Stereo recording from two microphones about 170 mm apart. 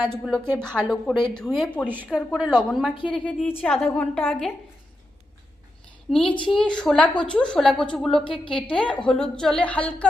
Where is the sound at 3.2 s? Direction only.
10° left (ahead or behind).